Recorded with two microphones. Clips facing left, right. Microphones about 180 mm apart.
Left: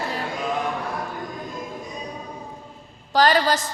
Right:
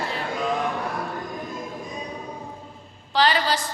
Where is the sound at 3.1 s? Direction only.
45° left (ahead or behind).